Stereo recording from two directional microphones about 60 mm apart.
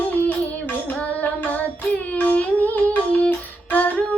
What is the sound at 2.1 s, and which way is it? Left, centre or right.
Music, left.